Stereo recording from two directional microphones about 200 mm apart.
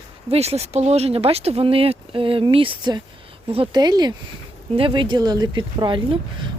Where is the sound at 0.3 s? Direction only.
30° right (ahead or behind).